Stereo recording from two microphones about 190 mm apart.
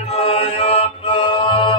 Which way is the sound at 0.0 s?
35° left (ahead or behind).